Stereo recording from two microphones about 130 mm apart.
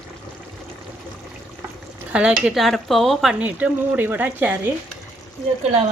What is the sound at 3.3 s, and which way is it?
Speech, 10° right (ahead or behind).